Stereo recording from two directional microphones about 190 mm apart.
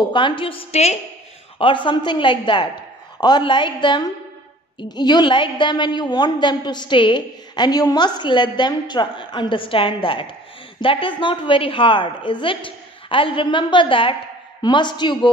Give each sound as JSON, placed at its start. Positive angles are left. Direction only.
{"t": 0.1, "sound": "a woman's voice", "side_deg": 25}